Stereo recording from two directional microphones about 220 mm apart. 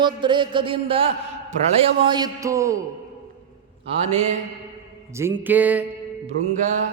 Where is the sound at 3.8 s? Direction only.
30° right (ahead or behind).